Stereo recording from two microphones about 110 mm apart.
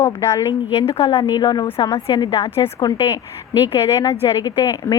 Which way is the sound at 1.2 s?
40° left (ahead or behind).